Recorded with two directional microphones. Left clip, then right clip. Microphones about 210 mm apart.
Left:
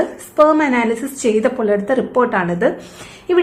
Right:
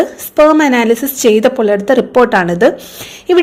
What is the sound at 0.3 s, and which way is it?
A woman's voice, 30° right (ahead or behind).